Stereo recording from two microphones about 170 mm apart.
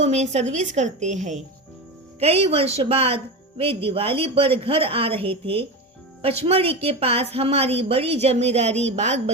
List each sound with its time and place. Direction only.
0.0 s a woman's voice: 40° right (ahead or behind)